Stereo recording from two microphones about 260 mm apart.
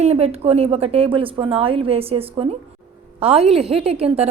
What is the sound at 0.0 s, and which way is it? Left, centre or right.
A woman's voice, right.